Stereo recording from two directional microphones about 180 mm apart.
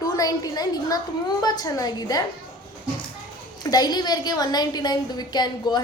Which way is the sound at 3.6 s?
20° left (ahead or behind).